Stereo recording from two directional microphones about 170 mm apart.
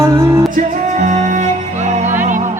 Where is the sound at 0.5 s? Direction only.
50° right (ahead or behind).